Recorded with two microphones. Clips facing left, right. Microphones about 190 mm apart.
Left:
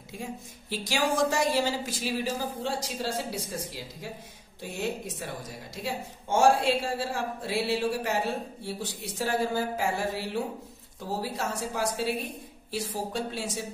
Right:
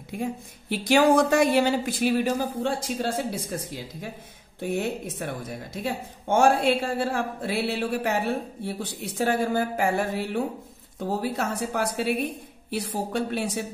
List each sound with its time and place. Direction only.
0.2 s a woman's voice: 60° right (ahead or behind)